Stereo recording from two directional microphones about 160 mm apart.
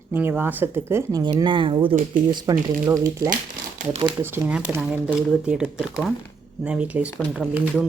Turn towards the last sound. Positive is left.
turn(degrees=-5)  # may be behind; listen again after turning